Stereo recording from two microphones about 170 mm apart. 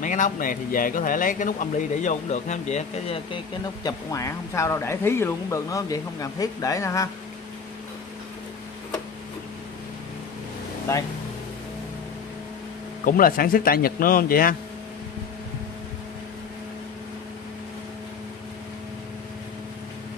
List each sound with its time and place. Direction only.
0.0 s speech: 50° left (ahead or behind)
3.8 s speech: 20° left (ahead or behind)
13.0 s a man's voice: 55° left (ahead or behind)